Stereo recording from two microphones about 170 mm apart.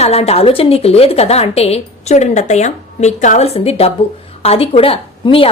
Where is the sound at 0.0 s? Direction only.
35° left (ahead or behind).